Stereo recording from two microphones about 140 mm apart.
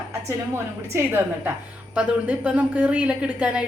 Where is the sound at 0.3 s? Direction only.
15° right (ahead or behind).